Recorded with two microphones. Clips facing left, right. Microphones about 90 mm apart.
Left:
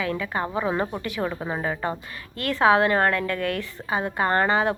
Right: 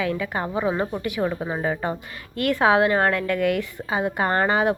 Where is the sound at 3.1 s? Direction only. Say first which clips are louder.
Right 4 dB; 40° left (ahead or behind).